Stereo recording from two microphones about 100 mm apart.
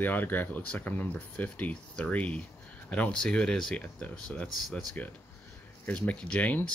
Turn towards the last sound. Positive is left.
turn(degrees=15)  # may be behind; listen again after turning